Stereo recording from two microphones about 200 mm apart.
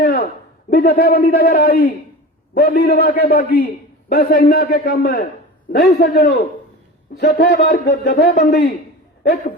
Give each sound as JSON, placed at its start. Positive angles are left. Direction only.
{"t": 0.0, "sound": "a sound", "side_deg": 50}
{"t": 0.7, "sound": "a man's voice", "side_deg": 45}
{"t": 9.2, "sound": "a man's voice", "side_deg": 45}